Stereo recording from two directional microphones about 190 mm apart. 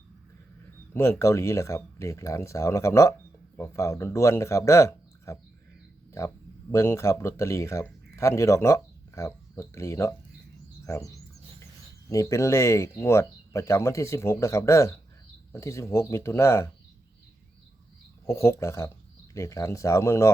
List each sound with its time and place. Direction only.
0.9 s speech: 15° left (ahead or behind)
18.3 s speech: 15° left (ahead or behind)